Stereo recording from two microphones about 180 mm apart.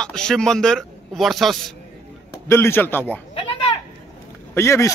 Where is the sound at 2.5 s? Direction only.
15° left (ahead or behind).